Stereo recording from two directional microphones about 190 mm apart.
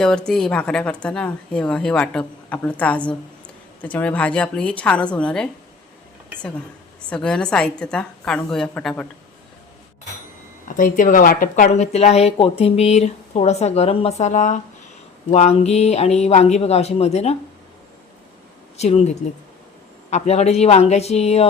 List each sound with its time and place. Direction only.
0.0 s a woman's voice: 5° left (ahead or behind)
7.1 s a woman's voice: 5° left (ahead or behind)
10.8 s speech: 45° left (ahead or behind)
18.8 s speech: 35° left (ahead or behind)